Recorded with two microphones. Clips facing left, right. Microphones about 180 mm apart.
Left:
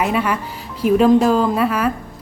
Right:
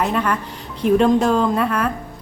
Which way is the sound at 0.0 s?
5° left (ahead or behind).